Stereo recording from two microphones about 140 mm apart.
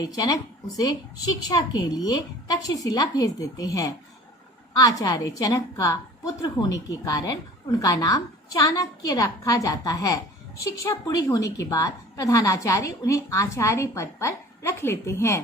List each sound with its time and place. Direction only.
0.0 s a woman's voice: 25° left (ahead or behind)